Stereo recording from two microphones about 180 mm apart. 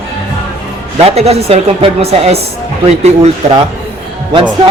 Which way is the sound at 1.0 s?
35° right (ahead or behind).